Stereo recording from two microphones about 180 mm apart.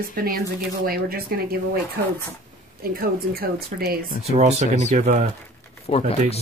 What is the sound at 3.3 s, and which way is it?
Speech, 55° right (ahead or behind).